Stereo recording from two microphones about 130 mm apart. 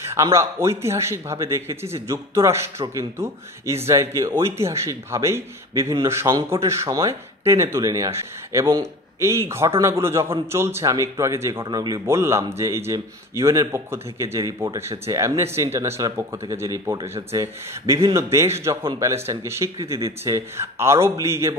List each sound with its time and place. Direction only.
0.1 s a man's voice: 25° right (ahead or behind)
11.6 s a man's voice: 30° right (ahead or behind)